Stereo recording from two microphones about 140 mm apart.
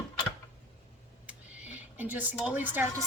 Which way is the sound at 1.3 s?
10° right (ahead or behind).